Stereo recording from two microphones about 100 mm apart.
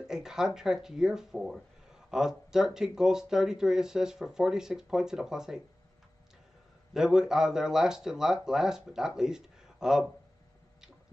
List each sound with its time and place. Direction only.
0.0 s speech: 5° right (ahead or behind)
6.9 s speech: 5° right (ahead or behind)